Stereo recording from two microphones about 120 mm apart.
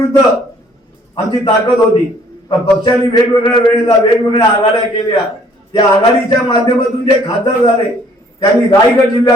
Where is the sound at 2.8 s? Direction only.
40° left (ahead or behind).